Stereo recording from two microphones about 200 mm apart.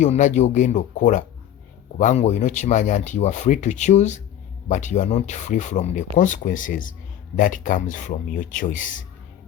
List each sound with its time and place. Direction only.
0.0 s speech: 35° left (ahead or behind)